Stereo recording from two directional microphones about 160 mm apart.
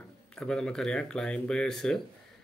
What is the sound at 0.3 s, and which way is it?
Speech, 5° left (ahead or behind).